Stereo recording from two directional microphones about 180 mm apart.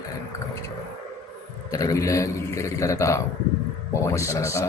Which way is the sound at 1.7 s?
20° left (ahead or behind).